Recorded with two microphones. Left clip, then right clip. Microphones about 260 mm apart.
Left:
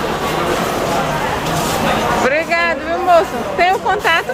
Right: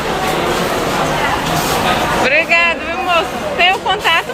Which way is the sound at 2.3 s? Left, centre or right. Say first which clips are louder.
Right 3 dB; centre.